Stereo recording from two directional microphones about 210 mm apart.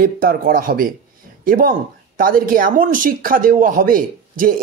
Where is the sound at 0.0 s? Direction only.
40° right (ahead or behind).